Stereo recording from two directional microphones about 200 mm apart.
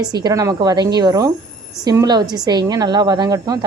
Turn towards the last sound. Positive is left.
turn(degrees=-20)  # may be behind; listen again after turning